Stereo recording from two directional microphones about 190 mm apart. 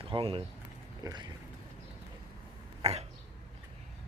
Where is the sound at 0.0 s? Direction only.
30° right (ahead or behind).